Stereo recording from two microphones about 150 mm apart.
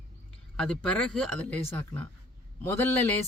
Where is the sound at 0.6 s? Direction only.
5° left (ahead or behind).